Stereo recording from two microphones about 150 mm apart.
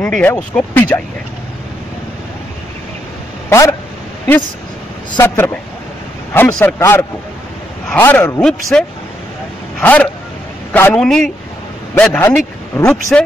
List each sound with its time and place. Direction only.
0.0 s speech: 10° left (ahead or behind)
3.4 s speech: 20° left (ahead or behind)
5.2 s speech: 15° left (ahead or behind)
8.4 s a man's voice: 5° left (ahead or behind)
9.8 s a sound: 10° left (ahead or behind)
10.7 s a man's voice: 10° left (ahead or behind)